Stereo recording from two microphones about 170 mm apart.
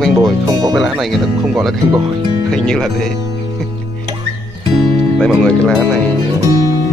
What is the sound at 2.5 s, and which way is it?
Speech, 5° left (ahead or behind).